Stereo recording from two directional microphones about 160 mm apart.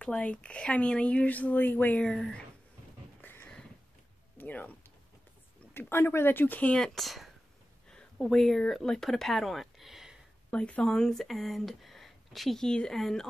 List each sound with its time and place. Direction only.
0.0 s speech: 5° left (ahead or behind)
3.2 s a sound: 10° left (ahead or behind)
4.4 s speech: 10° left (ahead or behind)